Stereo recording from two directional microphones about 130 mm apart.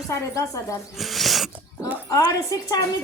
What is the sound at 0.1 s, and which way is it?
Speech, 25° left (ahead or behind).